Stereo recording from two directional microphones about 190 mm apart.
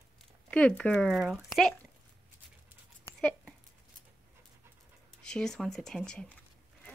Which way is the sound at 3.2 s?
5° left (ahead or behind).